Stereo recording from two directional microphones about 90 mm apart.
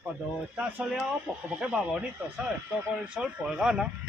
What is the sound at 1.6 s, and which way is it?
Speech, 15° right (ahead or behind).